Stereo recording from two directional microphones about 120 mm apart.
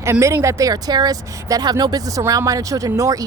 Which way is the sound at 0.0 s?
25° right (ahead or behind).